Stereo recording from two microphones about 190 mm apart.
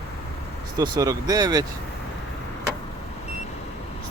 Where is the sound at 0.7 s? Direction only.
20° right (ahead or behind).